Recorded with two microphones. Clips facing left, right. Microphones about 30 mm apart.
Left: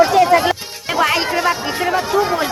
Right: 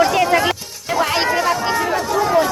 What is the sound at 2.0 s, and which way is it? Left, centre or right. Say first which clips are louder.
Speech: right 1 dB; left.